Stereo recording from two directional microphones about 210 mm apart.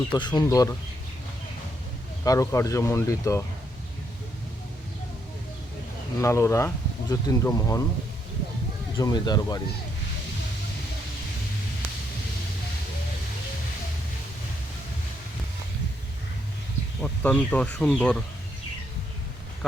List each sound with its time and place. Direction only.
0.1 s speech: 20° left (ahead or behind)
2.2 s speech: 15° left (ahead or behind)
6.1 s speech: 15° left (ahead or behind)
9.0 s speech: 20° left (ahead or behind)
17.0 s speech: 5° left (ahead or behind)